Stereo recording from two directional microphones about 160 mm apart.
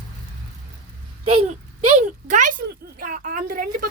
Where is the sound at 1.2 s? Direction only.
40° right (ahead or behind).